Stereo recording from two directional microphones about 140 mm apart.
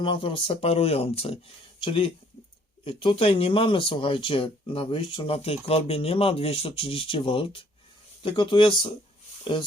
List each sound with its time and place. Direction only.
0.0 s speech: 35° left (ahead or behind)